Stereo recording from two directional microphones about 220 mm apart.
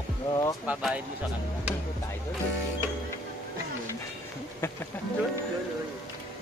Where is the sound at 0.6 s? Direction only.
5° right (ahead or behind).